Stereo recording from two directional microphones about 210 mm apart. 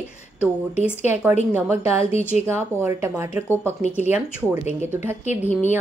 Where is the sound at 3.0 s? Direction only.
10° right (ahead or behind).